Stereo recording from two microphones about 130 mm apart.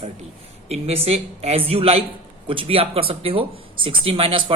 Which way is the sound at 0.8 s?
50° right (ahead or behind).